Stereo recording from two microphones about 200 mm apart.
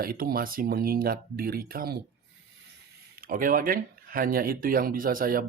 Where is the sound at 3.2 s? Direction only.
45° right (ahead or behind).